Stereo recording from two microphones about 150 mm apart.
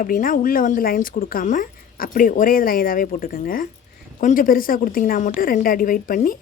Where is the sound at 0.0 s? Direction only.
70° left (ahead or behind).